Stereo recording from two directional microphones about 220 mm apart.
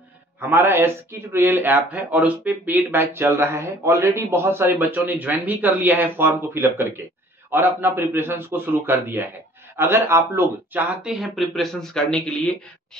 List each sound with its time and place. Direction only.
0.4 s a man's voice: 10° right (ahead or behind)